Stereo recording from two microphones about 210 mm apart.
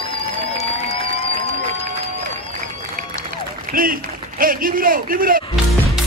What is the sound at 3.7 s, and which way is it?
A man's voice, 45° right (ahead or behind).